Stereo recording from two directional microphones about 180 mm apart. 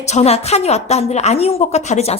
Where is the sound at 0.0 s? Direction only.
35° left (ahead or behind).